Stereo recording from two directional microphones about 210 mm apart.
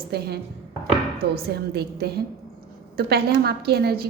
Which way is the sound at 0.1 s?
50° right (ahead or behind).